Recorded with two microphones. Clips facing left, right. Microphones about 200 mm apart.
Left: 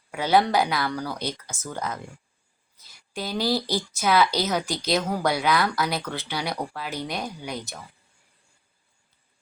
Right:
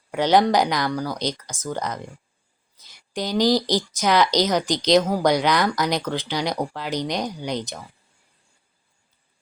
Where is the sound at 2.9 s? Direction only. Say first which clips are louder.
Right 5 dB; 15° right (ahead or behind).